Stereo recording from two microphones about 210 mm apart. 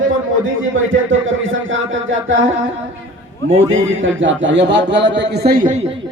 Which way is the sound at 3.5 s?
25° right (ahead or behind).